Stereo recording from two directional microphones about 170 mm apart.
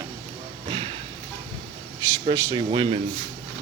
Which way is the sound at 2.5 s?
30° right (ahead or behind).